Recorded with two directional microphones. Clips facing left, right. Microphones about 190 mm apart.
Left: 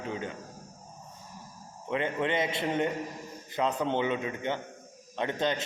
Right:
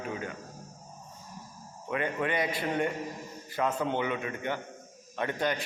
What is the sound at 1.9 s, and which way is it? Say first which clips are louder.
A man's voice: left 1 dB; 20° left (ahead or behind).